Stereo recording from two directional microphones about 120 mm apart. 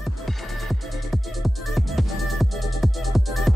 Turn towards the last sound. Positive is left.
turn(degrees=0)  # may be behind; listen again after turning